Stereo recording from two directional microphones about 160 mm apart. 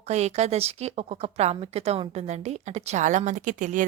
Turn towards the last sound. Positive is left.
turn(degrees=-55)  # may be behind; listen again after turning